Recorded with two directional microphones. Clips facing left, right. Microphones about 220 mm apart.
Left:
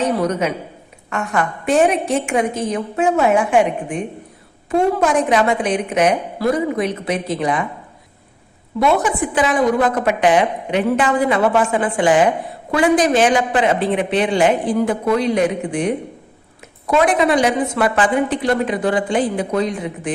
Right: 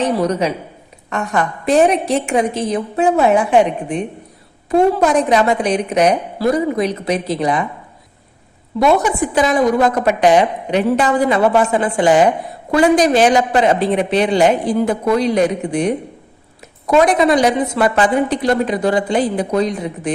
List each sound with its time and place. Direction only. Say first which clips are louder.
0.3 s a woman's voice: right 2 dB; 35° right (ahead or behind)
9.3 s a woman's voice: right 2 dB; 40° right (ahead or behind)